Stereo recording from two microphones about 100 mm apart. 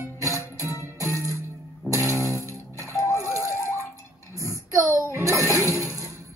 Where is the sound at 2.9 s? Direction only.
30° left (ahead or behind).